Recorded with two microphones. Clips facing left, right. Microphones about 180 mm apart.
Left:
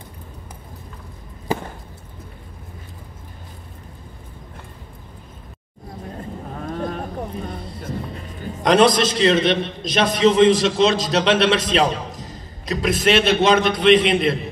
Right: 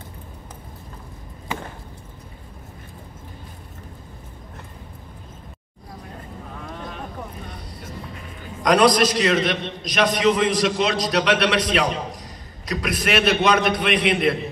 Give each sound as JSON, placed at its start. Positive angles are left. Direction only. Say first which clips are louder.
{"t": 1.5, "sound": "chop", "louder": "left 7 dB", "side_deg": 35}
{"t": 6.5, "sound": "cattle", "louder": "left 9 dB", "side_deg": 45}
{"t": 8.6, "sound": "a man's voice", "louder": "left 1 dB", "side_deg": 25}